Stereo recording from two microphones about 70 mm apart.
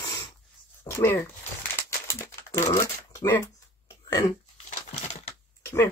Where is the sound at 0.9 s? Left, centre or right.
Left.